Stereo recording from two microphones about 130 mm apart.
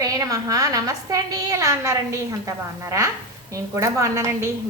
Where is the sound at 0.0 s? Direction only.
25° right (ahead or behind).